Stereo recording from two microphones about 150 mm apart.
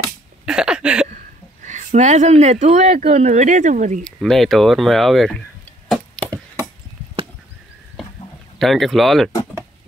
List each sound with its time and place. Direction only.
0.5 s a sound: 5° right (ahead or behind)
1.0 s speech: 55° right (ahead or behind)
4.0 s speech: centre (ahead or behind)
6.1 s chop: 35° right (ahead or behind)
8.5 s speech: centre (ahead or behind)